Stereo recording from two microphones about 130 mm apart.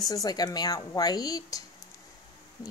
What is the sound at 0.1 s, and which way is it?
Speech, 30° left (ahead or behind).